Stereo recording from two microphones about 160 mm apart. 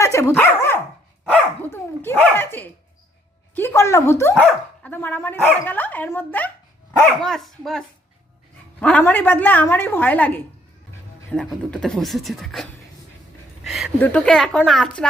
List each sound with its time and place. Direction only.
0.0 s dog: 20° left (ahead or behind)
3.5 s speech: 15° left (ahead or behind)
13.7 s speech: centre (ahead or behind)